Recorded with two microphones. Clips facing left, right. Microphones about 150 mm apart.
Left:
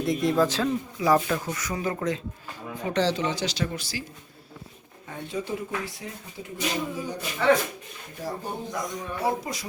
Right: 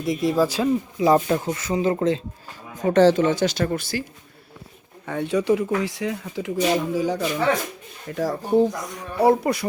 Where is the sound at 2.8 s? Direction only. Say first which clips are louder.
Right 9 dB; 50° right (ahead or behind).